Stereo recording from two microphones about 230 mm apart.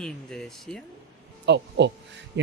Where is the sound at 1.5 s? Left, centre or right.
Right.